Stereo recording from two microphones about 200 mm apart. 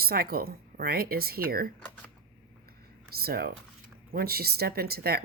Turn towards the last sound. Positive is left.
turn(degrees=-50)  # may be behind; listen again after turning